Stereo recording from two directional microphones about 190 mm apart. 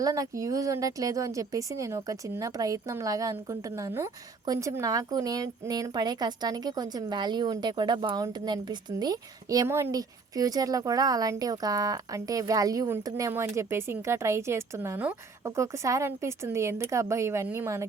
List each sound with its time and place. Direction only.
0.0 s a woman's voice: 15° right (ahead or behind)